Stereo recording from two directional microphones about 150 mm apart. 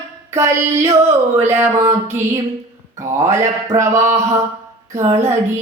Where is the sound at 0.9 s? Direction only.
20° right (ahead or behind).